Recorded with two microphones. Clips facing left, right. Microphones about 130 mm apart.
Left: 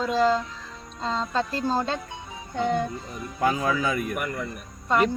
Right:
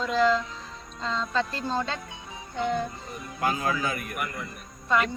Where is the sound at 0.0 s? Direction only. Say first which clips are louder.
Left 1 dB; 35° left (ahead or behind).